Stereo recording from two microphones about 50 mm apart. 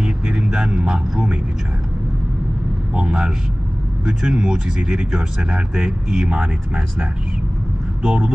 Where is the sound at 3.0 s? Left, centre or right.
Centre.